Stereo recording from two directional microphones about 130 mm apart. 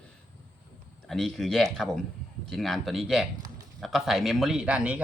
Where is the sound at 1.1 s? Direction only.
Centre (ahead or behind).